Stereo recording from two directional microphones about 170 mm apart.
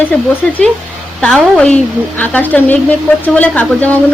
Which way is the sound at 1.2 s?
5° left (ahead or behind).